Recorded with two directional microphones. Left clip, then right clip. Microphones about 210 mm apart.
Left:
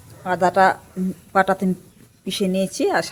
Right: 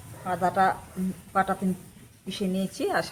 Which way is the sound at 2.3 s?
40° left (ahead or behind).